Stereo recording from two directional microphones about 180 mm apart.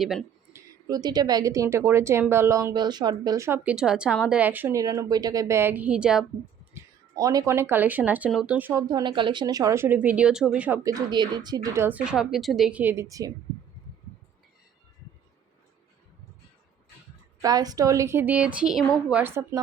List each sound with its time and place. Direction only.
0.0 s speech: centre (ahead or behind)
0.5 s a woman's voice: 20° right (ahead or behind); by 6.2 s 5° right (ahead or behind)
6.7 s speech: 20° right (ahead or behind)
8.9 s a woman's voice: 25° right (ahead or behind); by 10.8 s 5° right (ahead or behind)
10.8 s a woman's voice: 20° right (ahead or behind)
17.4 s a woman's voice: 20° right (ahead or behind)